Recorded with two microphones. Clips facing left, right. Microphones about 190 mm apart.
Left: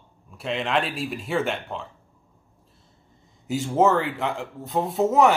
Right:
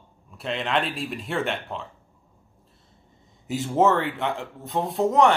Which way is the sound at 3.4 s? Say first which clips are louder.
Left 1 dB; centre (ahead or behind).